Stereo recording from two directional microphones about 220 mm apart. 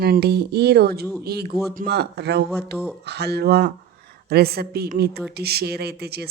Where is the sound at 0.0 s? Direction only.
45° right (ahead or behind).